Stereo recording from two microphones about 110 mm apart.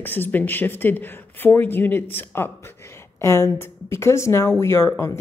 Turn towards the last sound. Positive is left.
turn(degrees=25)  # may be behind; listen again after turning